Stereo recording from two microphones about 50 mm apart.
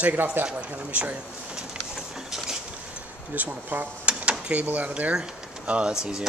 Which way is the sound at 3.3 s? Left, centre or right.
Right.